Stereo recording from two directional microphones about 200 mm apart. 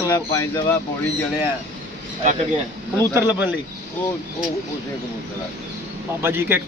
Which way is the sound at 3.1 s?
10° right (ahead or behind).